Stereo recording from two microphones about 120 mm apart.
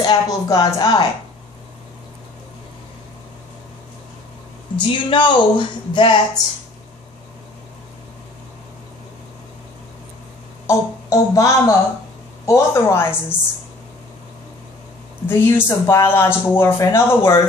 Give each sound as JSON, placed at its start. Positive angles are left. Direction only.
{"t": 0.0, "sound": "speech", "side_deg": 30}
{"t": 4.7, "sound": "speech", "side_deg": 40}
{"t": 10.7, "sound": "speech", "side_deg": 25}
{"t": 15.2, "sound": "speech", "side_deg": 20}